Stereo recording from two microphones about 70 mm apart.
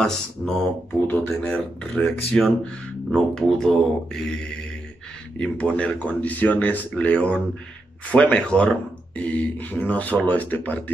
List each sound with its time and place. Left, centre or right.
0.0 s speech: centre
1.0 s speech: left
1.8 s speech: centre
5.4 s speech: centre